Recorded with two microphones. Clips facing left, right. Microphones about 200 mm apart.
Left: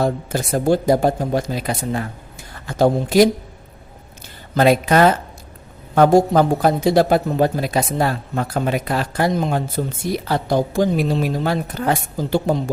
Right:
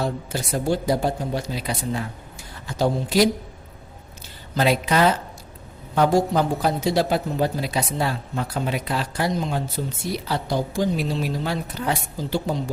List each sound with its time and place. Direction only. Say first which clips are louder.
0.0 s a man's voice: left 6 dB; 50° left (ahead or behind)
4.5 s a man's voice: left 6 dB; 50° left (ahead or behind)